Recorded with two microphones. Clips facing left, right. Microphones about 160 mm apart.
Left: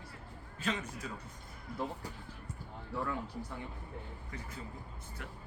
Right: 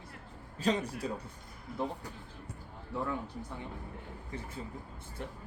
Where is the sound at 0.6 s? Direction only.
35° right (ahead or behind).